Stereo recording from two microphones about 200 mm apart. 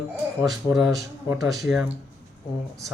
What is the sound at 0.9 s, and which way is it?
Speech, 15° right (ahead or behind).